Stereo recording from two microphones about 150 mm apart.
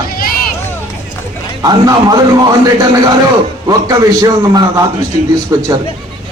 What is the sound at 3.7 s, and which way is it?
A man's voice, 25° right (ahead or behind).